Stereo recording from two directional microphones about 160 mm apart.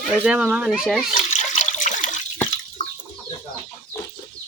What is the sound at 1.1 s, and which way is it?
Water, 50° left (ahead or behind).